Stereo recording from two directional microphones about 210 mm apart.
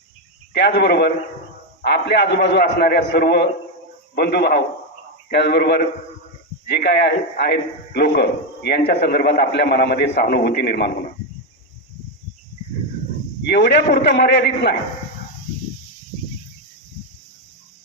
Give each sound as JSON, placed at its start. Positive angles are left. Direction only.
{"t": 0.5, "sound": "a man's voice", "side_deg": 50}
{"t": 13.4, "sound": "a man's voice", "side_deg": 55}